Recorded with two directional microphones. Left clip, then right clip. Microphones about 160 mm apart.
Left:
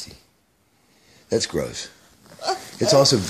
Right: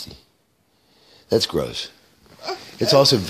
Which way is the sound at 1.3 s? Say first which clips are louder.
Right 3 dB; 25° right (ahead or behind).